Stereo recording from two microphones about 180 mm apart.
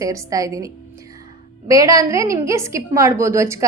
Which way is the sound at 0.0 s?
20° right (ahead or behind).